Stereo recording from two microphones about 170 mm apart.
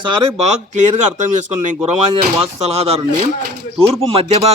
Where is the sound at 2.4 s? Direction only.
35° right (ahead or behind).